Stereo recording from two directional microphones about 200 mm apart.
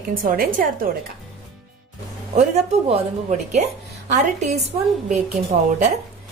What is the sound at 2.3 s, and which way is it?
A woman's voice, 35° right (ahead or behind).